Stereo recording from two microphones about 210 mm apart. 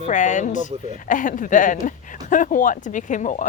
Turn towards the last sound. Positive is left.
turn(degrees=35)  # may be behind; listen again after turning